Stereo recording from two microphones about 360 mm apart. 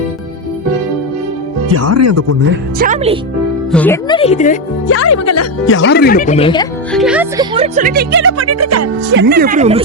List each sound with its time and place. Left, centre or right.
1.7 s speech: right
2.7 s speech: right
3.7 s speech: centre
4.2 s speech: centre
4.9 s speech: left; by 6.7 s centre
6.9 s speech: centre; by 9.1 s right
9.1 s speech: right